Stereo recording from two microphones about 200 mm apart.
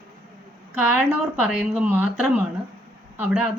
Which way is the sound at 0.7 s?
5° right (ahead or behind).